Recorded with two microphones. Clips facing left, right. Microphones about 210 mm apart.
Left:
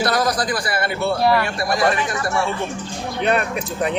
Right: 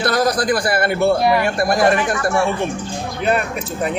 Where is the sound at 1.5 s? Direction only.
50° right (ahead or behind).